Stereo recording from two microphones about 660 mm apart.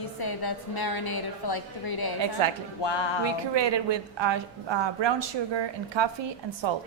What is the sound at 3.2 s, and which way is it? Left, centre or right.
A woman's voice, right.